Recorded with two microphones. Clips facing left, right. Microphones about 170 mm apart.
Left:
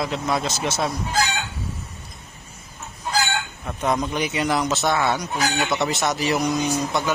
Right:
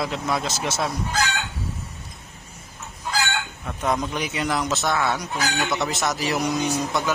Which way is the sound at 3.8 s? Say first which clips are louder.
Left 2 dB; 5° left (ahead or behind).